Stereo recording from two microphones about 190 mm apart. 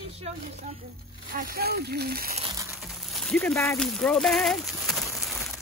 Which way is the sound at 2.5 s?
15° right (ahead or behind).